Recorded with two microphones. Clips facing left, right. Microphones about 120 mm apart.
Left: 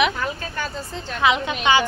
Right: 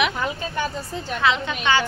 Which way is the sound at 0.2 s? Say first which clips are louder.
Right 2 dB; 15° right (ahead or behind).